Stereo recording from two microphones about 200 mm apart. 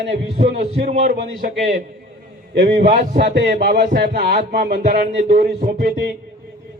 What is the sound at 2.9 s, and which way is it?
Speech, 40° right (ahead or behind).